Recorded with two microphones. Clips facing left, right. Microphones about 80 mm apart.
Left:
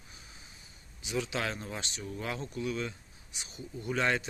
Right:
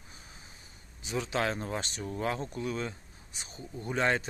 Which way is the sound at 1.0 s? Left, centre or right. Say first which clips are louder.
Right 2 dB; right.